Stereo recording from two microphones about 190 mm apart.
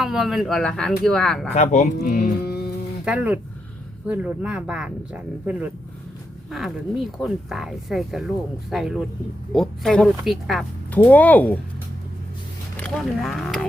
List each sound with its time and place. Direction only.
0.0 s speech: centre (ahead or behind)
1.5 s speech: 40° left (ahead or behind)
2.0 s music: 45° left (ahead or behind)
3.0 s speech: 5° right (ahead or behind)
12.8 s speech: centre (ahead or behind)